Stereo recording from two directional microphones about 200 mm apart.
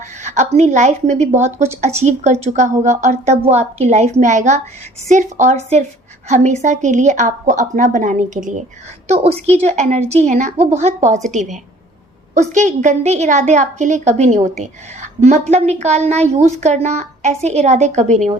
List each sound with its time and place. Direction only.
0.2 s a woman's voice: 35° right (ahead or behind)
12.3 s a woman's voice: 35° right (ahead or behind)